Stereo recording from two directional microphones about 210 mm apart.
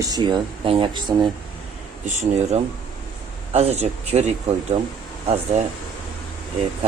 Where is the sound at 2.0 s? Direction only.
35° right (ahead or behind).